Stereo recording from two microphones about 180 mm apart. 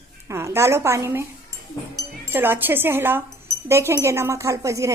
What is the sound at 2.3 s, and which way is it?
Speech, 10° right (ahead or behind).